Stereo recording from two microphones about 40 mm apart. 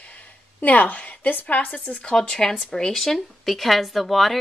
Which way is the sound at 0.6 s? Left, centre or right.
Left.